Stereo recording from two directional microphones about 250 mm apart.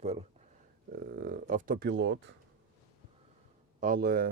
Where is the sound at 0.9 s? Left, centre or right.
Right.